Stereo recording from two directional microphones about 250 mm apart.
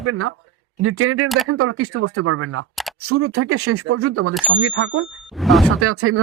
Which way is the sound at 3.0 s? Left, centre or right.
Right.